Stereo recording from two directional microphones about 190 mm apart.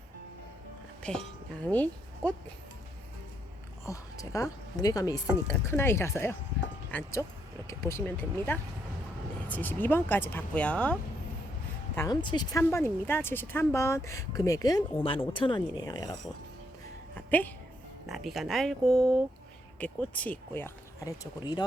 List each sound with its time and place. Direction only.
1.0 s speech: 5° left (ahead or behind)
3.8 s speech: 15° left (ahead or behind)
11.9 s speech: 20° left (ahead or behind)
17.2 s a sound: 10° left (ahead or behind)
18.0 s speech: centre (ahead or behind)